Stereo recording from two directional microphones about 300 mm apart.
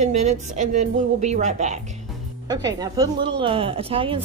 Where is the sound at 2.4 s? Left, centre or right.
Centre.